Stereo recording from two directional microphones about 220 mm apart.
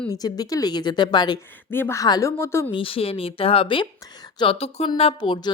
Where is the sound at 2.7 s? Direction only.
25° left (ahead or behind).